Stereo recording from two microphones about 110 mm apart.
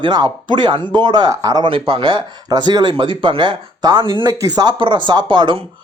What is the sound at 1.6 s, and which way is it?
Speech, 50° right (ahead or behind).